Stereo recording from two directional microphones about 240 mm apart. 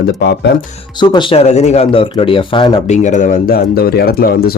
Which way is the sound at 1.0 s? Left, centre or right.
Centre.